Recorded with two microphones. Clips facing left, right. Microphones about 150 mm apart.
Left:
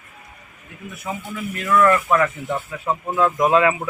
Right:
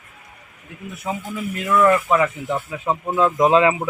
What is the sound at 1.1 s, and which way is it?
Speech, 25° right (ahead or behind).